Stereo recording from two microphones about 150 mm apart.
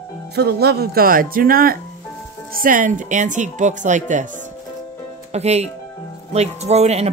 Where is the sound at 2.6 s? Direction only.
60° right (ahead or behind).